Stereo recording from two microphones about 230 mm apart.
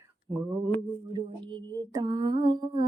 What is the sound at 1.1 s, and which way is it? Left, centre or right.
Female singing, centre.